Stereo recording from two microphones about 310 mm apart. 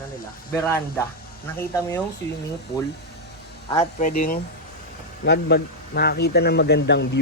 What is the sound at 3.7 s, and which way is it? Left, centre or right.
Speech, centre.